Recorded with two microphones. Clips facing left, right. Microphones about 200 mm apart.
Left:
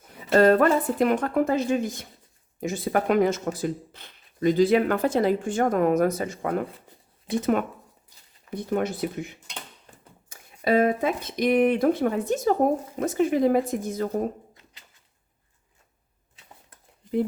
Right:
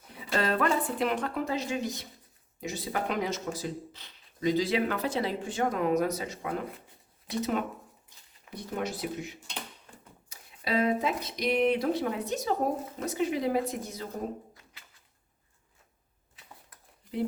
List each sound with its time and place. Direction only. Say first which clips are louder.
0.1 s speech: left 11 dB; 45° left (ahead or behind)
8.7 s speech: left 7 dB; 55° left (ahead or behind)